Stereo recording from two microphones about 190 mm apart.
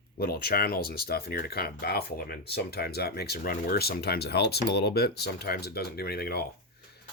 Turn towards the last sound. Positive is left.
turn(degrees=55)  # may be behind; listen again after turning